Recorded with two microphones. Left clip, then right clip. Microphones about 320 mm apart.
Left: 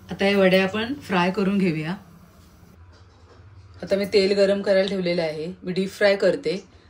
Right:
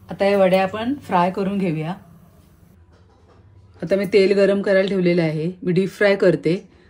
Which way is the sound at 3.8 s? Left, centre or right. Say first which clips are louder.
Right 4 dB; right.